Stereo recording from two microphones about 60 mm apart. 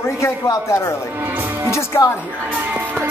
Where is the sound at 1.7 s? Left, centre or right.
Left.